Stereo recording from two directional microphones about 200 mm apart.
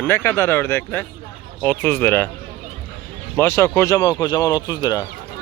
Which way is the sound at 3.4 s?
10° left (ahead or behind).